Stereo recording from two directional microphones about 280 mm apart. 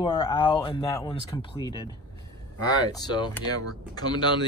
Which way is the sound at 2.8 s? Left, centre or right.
Centre.